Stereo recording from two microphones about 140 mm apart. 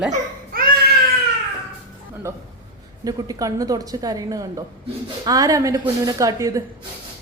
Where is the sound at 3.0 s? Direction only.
25° right (ahead or behind).